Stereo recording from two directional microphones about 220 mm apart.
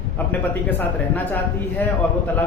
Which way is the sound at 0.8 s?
10° left (ahead or behind).